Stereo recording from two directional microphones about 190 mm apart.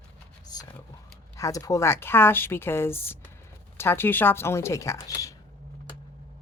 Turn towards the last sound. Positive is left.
turn(degrees=15)  # may be behind; listen again after turning